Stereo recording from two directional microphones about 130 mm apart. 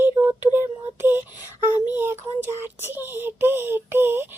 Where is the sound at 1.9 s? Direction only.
15° right (ahead or behind).